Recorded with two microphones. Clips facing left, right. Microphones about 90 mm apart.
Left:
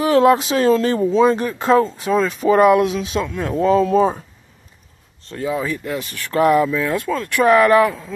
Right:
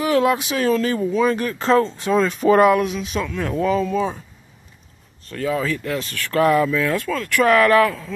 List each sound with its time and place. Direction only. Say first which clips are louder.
0.0 s speech: left 5 dB; 35° left (ahead or behind); by 2.8 s 10° left (ahead or behind)
3.4 s speech: left 5 dB; 35° left (ahead or behind)
5.3 s speech: even; 20° left (ahead or behind)